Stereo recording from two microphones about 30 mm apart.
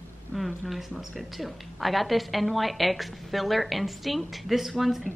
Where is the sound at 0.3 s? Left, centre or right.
Left.